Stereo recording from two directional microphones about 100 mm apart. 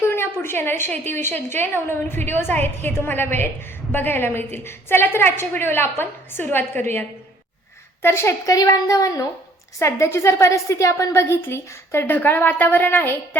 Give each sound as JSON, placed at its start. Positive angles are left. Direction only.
{"t": 0.0, "sound": "a woman's voice", "side_deg": 25}
{"t": 8.0, "sound": "a woman's voice", "side_deg": 25}